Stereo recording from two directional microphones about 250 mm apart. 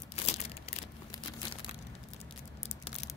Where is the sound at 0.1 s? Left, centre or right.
Left.